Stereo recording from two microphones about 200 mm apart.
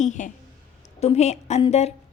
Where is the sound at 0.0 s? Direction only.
35° left (ahead or behind).